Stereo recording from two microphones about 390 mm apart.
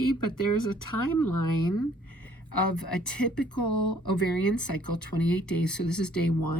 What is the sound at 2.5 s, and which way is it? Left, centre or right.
Speech, left.